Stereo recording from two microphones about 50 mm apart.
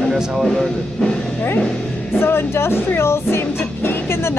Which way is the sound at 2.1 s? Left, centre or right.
Left.